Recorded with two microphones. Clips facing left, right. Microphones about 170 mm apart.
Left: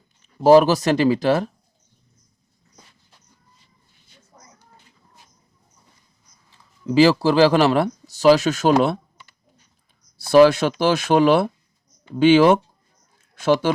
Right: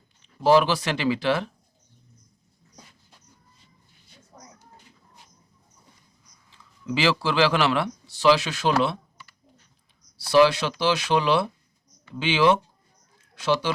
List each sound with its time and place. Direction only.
0.2 s speech: 45° left (ahead or behind)
6.8 s speech: 40° left (ahead or behind)
10.2 s speech: 50° left (ahead or behind)